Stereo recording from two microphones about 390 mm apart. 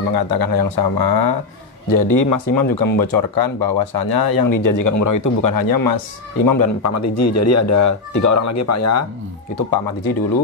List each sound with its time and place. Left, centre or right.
0.1 s speech: left
1.9 s speech: left
9.6 s speech: left